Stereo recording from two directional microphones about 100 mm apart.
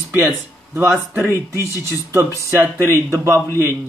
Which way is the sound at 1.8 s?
25° right (ahead or behind).